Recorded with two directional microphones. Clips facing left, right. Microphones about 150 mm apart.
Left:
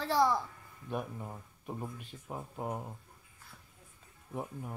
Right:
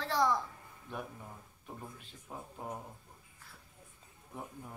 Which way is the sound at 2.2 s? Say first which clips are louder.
Left 5 dB; 25° left (ahead or behind).